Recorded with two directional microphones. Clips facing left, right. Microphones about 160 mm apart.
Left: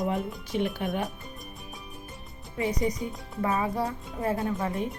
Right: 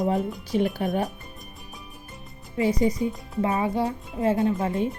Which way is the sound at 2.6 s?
30° right (ahead or behind).